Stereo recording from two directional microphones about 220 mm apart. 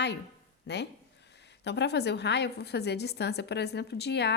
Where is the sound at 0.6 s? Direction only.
50° left (ahead or behind).